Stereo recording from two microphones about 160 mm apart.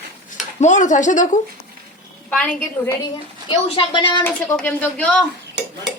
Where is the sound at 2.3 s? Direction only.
10° left (ahead or behind).